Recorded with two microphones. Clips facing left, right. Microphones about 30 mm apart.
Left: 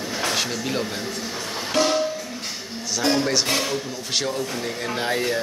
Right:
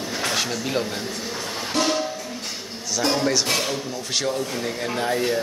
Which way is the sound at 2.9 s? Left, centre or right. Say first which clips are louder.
Even; centre.